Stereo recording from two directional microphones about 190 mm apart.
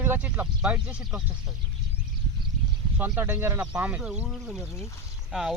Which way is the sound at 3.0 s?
10° right (ahead or behind).